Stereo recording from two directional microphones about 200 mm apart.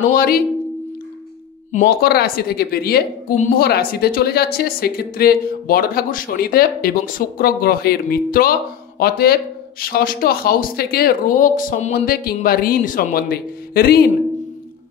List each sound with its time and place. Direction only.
0.1 s a woman's voice: 50° left (ahead or behind)
1.7 s a woman's voice: 45° left (ahead or behind)